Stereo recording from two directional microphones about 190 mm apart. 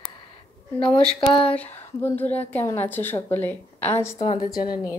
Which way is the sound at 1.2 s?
25° left (ahead or behind).